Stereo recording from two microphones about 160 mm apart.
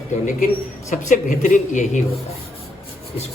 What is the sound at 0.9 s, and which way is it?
Speech, 50° left (ahead or behind).